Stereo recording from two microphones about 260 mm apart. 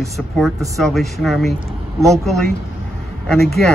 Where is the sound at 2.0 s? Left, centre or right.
Centre.